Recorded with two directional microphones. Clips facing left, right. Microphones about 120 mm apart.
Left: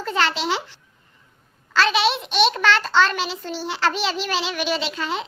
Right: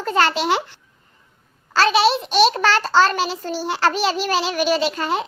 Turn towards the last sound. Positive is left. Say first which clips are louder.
# right 5 dB
turn(degrees=-45)  # may be behind; listen again after turning